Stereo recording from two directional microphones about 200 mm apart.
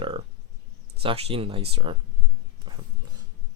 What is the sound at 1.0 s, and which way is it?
Speech, 30° right (ahead or behind).